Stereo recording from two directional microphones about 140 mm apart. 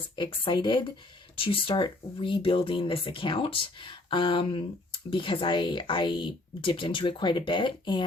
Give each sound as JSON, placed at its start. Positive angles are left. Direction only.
{"t": 0.2, "sound": "speech", "side_deg": 35}